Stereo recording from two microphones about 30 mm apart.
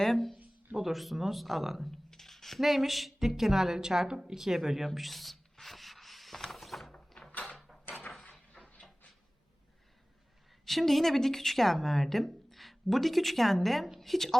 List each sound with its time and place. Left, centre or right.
0.0 s speech: centre
0.8 s a woman's voice: centre
1.9 s a sound: centre
2.6 s a woman's voice: centre
3.8 s a woman's voice: right
4.2 s a woman's voice: centre
4.9 s a woman's voice: centre
5.5 s a sound: centre
6.5 s mechanisms: centre
8.6 s a sound: centre
10.7 s speech: centre